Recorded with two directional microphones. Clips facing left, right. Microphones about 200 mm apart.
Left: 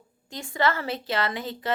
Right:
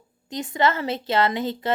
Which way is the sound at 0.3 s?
20° right (ahead or behind).